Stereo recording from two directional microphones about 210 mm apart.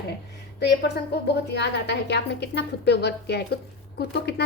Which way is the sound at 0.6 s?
50° left (ahead or behind).